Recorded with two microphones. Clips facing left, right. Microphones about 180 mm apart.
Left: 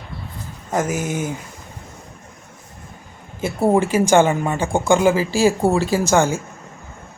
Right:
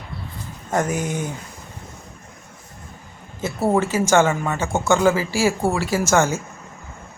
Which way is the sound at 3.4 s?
15° left (ahead or behind).